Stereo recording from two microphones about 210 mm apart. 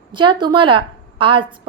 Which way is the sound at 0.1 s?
20° right (ahead or behind).